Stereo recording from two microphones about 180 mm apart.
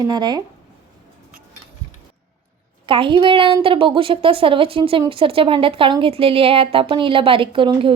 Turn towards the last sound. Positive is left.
turn(degrees=-30)  # may be behind; listen again after turning